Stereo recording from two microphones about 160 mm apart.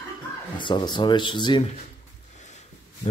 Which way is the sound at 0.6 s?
30° left (ahead or behind).